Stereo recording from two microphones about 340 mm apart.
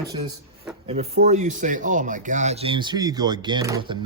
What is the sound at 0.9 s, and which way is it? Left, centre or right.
Speech, centre.